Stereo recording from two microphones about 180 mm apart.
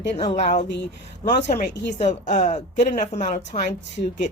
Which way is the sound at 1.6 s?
75° left (ahead or behind).